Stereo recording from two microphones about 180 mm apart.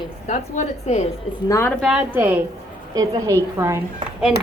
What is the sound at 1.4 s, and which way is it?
Speech, 15° left (ahead or behind).